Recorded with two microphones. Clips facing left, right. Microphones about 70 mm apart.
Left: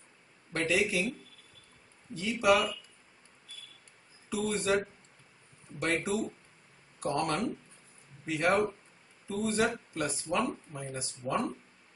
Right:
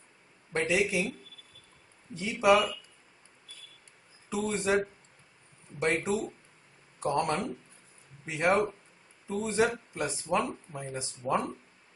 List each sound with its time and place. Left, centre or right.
0.5 s speech: centre
2.1 s speech: right
4.3 s speech: right